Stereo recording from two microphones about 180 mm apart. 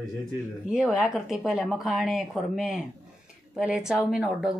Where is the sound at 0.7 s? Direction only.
5° right (ahead or behind).